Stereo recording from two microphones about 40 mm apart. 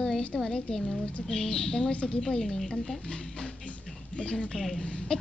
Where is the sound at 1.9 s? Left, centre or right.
Left.